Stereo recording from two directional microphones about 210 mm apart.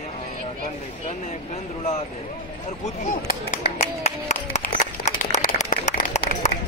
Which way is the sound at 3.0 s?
40° left (ahead or behind).